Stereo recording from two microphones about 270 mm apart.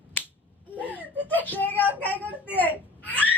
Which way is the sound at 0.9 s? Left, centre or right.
Centre.